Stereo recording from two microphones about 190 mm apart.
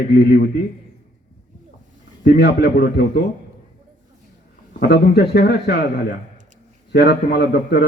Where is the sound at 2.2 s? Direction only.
60° left (ahead or behind).